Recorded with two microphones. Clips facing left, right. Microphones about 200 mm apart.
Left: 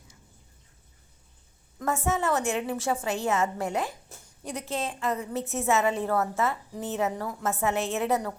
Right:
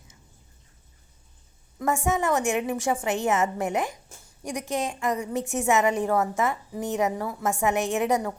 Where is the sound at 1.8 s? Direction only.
15° right (ahead or behind).